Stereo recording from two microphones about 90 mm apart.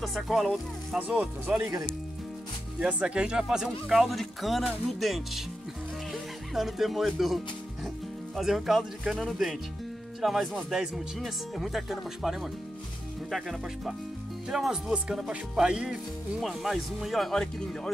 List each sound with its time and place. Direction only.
0.0 s speech: centre (ahead or behind)
0.9 s speech: 15° right (ahead or behind)
2.8 s speech: 10° right (ahead or behind)
6.5 s speech: 5° right (ahead or behind)
8.4 s speech: centre (ahead or behind)